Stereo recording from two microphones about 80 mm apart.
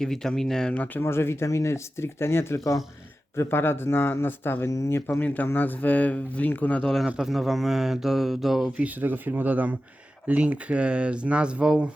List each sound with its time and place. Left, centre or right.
0.0 s speech: centre
0.7 s speech: left
1.0 s speech: left
5.2 s speech: centre
7.2 s speech: centre
8.8 s speech: right